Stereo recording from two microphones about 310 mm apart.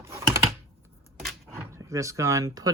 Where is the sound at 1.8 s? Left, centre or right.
Centre.